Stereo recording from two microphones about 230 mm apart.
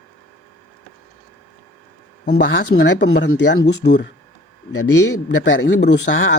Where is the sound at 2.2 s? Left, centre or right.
Left.